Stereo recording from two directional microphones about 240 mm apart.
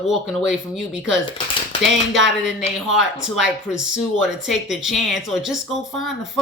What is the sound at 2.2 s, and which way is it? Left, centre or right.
Speech, right.